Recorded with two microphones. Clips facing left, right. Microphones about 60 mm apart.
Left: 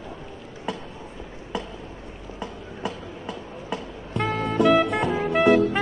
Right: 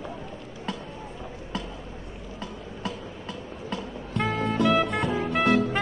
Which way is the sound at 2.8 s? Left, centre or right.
Centre.